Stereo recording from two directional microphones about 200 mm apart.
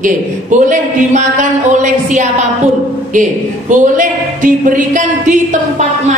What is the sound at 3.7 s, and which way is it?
A woman's voice, 40° right (ahead or behind).